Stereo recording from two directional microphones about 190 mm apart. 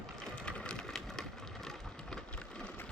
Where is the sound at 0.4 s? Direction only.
5° left (ahead or behind).